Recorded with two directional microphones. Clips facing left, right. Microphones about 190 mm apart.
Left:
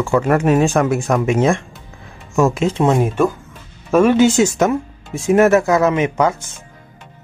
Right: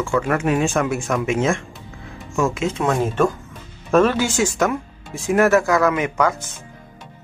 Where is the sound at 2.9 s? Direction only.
10° left (ahead or behind).